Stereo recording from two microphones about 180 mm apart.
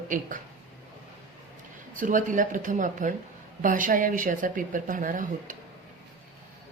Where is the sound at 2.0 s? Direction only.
45° right (ahead or behind).